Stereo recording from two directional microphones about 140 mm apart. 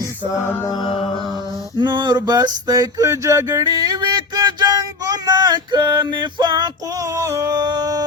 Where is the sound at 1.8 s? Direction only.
30° right (ahead or behind).